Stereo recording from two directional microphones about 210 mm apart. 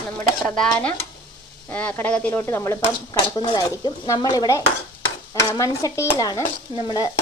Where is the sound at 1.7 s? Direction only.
5° left (ahead or behind).